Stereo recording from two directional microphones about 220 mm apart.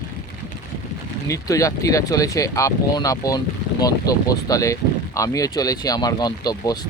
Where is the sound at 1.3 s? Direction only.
15° left (ahead or behind).